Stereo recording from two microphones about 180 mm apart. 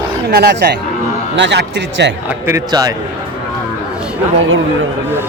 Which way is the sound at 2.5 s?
20° right (ahead or behind).